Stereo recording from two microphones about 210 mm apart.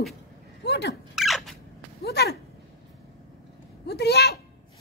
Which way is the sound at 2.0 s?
50° left (ahead or behind).